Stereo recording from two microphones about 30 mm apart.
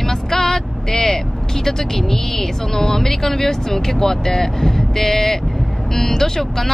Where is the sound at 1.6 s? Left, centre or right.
Centre.